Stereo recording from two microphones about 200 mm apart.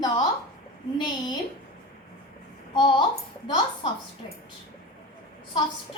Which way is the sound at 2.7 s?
25° left (ahead or behind).